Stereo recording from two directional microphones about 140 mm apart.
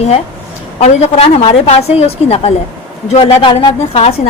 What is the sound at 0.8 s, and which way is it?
Speech, 50° left (ahead or behind).